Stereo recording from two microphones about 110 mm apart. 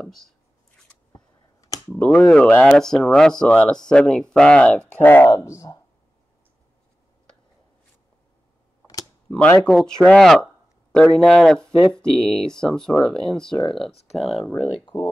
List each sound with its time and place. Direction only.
0.0 s speech: 5° left (ahead or behind)
1.6 s a sound: 30° left (ahead or behind)
2.0 s speech: 10° left (ahead or behind)
5.2 s speech: 25° left (ahead or behind)
9.3 s speech: 10° left (ahead or behind)
9.7 s speech: centre (ahead or behind)
14.5 s speech: 10° left (ahead or behind)